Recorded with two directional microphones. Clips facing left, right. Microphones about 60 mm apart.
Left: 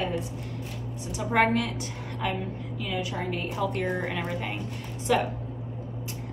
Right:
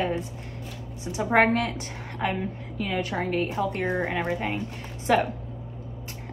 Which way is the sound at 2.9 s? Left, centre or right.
Right.